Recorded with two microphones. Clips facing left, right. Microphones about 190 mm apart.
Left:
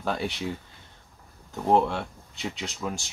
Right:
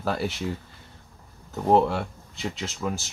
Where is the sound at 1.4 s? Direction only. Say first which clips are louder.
Right 2 dB; 5° right (ahead or behind).